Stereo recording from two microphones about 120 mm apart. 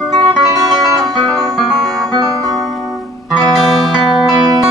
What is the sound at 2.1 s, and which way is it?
Music, 30° right (ahead or behind).